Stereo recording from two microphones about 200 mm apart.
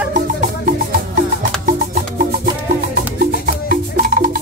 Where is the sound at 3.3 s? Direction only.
45° right (ahead or behind).